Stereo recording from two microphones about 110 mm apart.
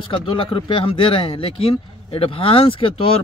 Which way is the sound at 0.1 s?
55° left (ahead or behind).